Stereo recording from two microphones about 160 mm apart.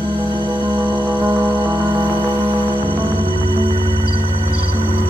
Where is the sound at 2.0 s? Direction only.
10° right (ahead or behind).